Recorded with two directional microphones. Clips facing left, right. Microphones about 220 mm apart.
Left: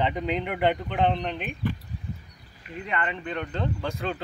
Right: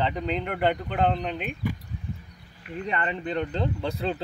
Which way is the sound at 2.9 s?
30° right (ahead or behind).